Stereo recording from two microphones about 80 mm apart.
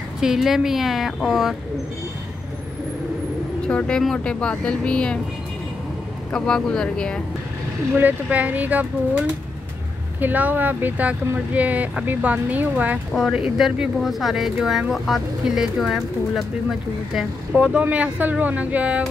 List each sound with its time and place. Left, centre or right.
0.2 s speech: centre
3.6 s speech: centre
6.3 s speech: centre
7.9 s speech: centre
10.2 s speech: right
13.1 s speech: centre
17.6 s speech: centre